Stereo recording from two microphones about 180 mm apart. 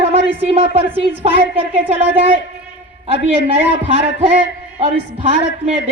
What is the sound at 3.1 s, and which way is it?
A woman's voice, 30° right (ahead or behind).